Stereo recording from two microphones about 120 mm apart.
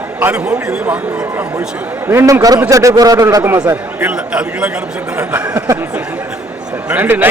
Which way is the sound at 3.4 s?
15° right (ahead or behind).